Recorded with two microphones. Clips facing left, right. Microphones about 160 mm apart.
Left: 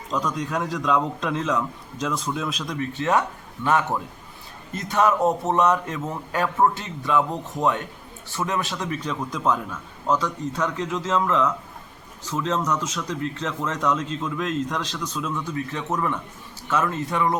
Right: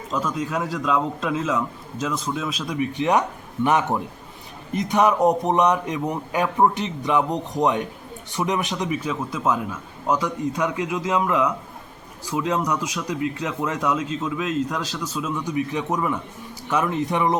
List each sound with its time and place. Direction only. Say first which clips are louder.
0.1 s a man's voice: right 1 dB; 5° right (ahead or behind)
2.7 s speech: right 2 dB; 15° right (ahead or behind)